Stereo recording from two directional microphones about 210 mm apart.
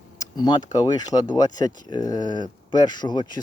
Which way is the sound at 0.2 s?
20° left (ahead or behind).